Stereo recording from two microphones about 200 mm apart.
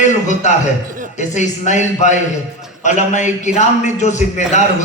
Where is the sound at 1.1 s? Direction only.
35° left (ahead or behind).